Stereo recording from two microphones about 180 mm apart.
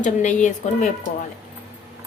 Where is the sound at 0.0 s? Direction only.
45° left (ahead or behind).